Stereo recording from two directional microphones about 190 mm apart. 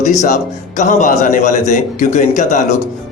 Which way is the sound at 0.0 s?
40° left (ahead or behind).